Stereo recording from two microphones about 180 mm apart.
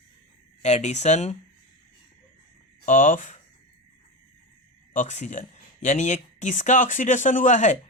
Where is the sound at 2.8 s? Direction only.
45° left (ahead or behind).